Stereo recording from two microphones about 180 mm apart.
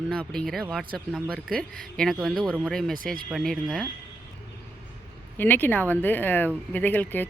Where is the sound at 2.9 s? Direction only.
50° right (ahead or behind).